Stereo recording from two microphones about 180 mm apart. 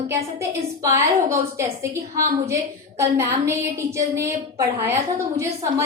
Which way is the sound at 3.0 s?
15° right (ahead or behind).